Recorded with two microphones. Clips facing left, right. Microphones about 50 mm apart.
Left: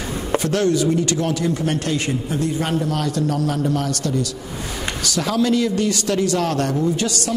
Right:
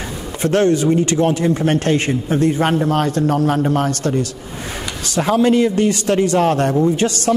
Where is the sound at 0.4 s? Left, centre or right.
Right.